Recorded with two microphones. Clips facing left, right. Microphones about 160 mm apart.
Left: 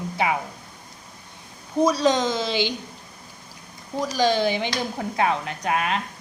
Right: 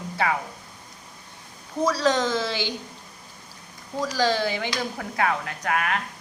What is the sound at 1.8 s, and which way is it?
Speech, 15° left (ahead or behind).